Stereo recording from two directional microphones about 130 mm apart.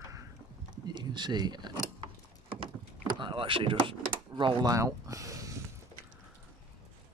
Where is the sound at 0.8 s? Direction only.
35° right (ahead or behind).